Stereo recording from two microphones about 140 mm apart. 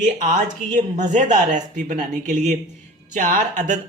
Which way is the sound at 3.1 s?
65° right (ahead or behind).